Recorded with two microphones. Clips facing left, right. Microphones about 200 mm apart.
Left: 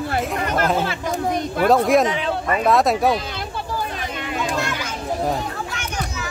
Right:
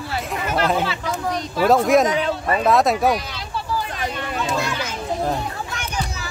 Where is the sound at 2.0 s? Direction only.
40° right (ahead or behind).